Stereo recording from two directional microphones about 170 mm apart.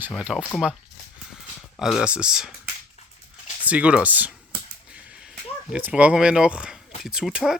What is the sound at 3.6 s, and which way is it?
Speech, 10° right (ahead or behind).